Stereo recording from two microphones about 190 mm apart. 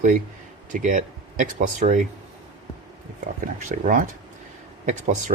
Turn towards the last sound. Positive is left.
turn(degrees=-40)  # may be behind; listen again after turning